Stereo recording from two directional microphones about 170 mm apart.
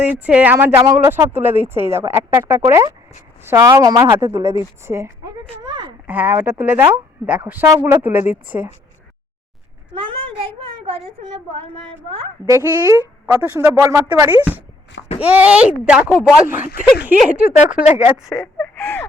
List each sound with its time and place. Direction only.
0.0 s a woman's voice: 10° right (ahead or behind)
5.6 s a sound: 25° right (ahead or behind)
6.1 s speech: 10° right (ahead or behind)
9.9 s a child's voice: 30° right (ahead or behind)
12.5 s speech: 20° right (ahead or behind)
18.3 s speech: 10° left (ahead or behind)